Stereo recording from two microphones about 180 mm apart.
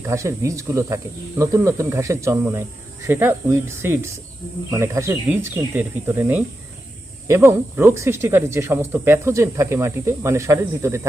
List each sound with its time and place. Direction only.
0.0 s speech: 15° right (ahead or behind)